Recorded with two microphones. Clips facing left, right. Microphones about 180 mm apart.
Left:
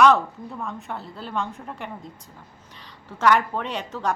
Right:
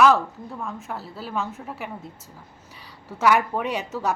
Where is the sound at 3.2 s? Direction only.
10° right (ahead or behind).